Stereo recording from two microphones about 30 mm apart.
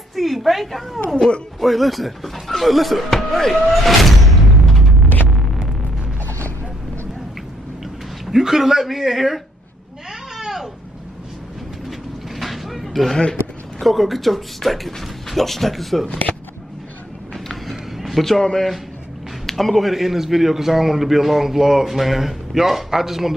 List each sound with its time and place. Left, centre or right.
0.1 s a woman's voice: centre
1.1 s speech: left
1.6 s a man's voice: centre
3.1 s music: centre
8.3 s speech: centre
10.3 s vehicle: centre
11.9 s vehicle: centre
13.7 s speech: centre
17.3 s a sound: centre
18.2 s speech: centre
19.4 s a man's voice: centre
19.9 s a man's voice: centre